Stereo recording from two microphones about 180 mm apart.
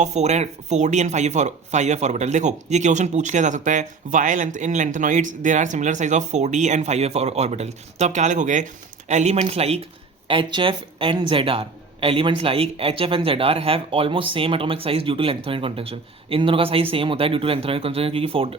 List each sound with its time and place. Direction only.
0.0 s speech: 40° right (ahead or behind)